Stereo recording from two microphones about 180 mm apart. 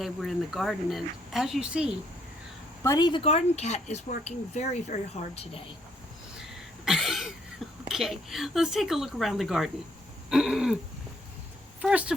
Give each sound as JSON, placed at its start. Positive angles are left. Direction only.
{"t": 0.0, "sound": "speech", "side_deg": 0}
{"t": 2.8, "sound": "a woman's voice", "side_deg": 20}
{"t": 6.4, "sound": "a sound", "side_deg": 0}
{"t": 7.9, "sound": "speech", "side_deg": 0}
{"t": 11.8, "sound": "speech", "side_deg": -5}